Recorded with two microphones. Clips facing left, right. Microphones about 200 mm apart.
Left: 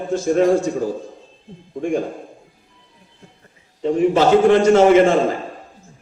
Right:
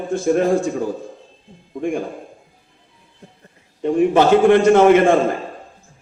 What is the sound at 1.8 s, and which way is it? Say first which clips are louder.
Speech: left 1 dB; 55° right (ahead or behind).